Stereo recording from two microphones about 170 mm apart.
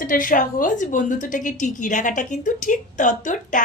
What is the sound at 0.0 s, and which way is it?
A woman's voice, 55° left (ahead or behind).